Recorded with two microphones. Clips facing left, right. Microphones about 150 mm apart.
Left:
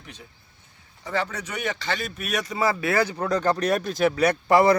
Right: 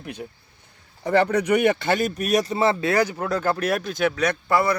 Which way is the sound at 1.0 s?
65° right (ahead or behind).